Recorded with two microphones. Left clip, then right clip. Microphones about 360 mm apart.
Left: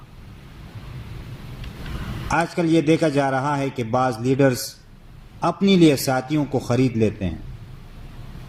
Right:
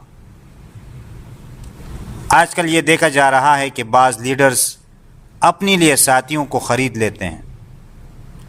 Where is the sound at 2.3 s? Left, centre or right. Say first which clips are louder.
Right 8 dB; right.